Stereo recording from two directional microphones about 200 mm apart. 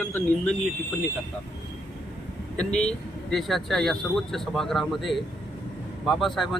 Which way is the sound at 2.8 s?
5° left (ahead or behind).